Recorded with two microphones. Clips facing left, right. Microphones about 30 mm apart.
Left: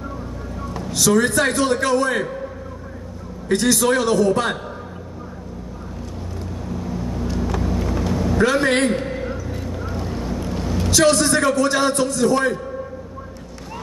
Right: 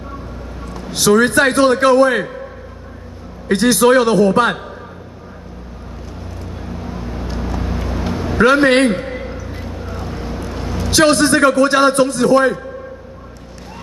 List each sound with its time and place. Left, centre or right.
0.8 s a man's voice: right
3.4 s a man's voice: right
6.6 s vehicle: right
9.2 s vehicle: right
10.9 s a man's voice: right